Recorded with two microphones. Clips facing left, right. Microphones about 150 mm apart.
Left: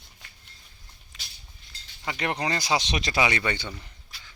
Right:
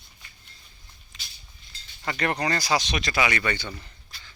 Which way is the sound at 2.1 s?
20° left (ahead or behind).